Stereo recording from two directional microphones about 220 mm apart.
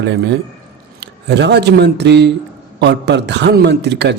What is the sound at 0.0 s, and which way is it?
A man's voice, 50° right (ahead or behind).